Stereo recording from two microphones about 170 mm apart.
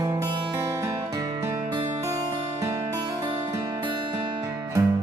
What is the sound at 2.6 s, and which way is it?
Music, 20° right (ahead or behind).